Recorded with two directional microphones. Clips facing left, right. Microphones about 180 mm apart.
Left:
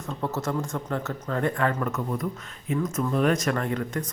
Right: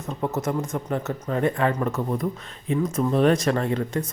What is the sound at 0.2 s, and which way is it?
Speech, 20° right (ahead or behind).